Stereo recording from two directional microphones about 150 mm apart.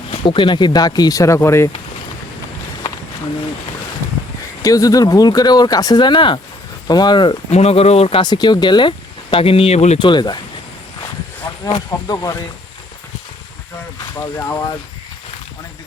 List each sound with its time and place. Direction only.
0.1 s speech: 35° left (ahead or behind); by 1.7 s 15° left (ahead or behind)
4.6 s speech: 25° left (ahead or behind)
7.5 s speech: 45° left (ahead or behind)
10.0 s speech: 30° left (ahead or behind)
11.6 s speech: 25° left (ahead or behind)
14.3 s speech: 20° left (ahead or behind)